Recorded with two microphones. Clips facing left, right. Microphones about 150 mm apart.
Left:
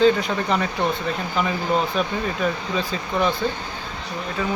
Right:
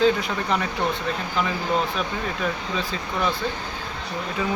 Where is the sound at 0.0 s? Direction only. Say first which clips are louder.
Left 3 dB; centre (ahead or behind).